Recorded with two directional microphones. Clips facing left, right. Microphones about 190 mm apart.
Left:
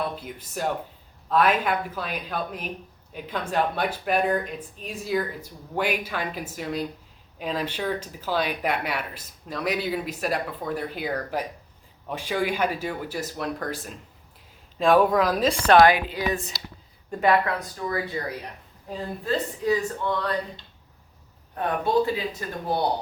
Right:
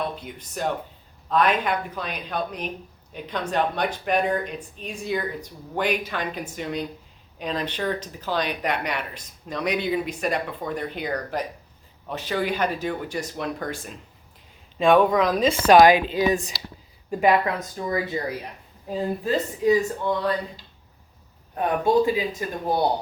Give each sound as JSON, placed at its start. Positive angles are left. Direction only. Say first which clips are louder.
{"t": 0.2, "sound": "speech", "louder": "right 1 dB", "side_deg": 5}
{"t": 15.6, "sound": "speech", "louder": "right 3 dB", "side_deg": -15}
{"t": 21.5, "sound": "speech", "louder": "right 3 dB", "side_deg": -15}